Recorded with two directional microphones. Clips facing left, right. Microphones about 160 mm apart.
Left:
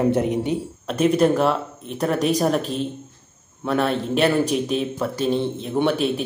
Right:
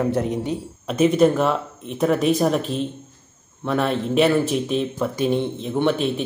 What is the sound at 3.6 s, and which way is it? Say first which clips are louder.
Speech: even; centre (ahead or behind).